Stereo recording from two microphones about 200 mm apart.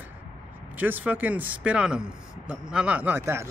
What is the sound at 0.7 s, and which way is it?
Speech, 10° right (ahead or behind).